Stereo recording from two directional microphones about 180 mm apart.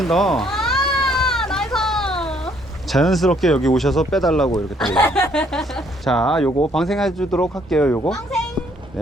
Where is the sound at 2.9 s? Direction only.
Centre (ahead or behind).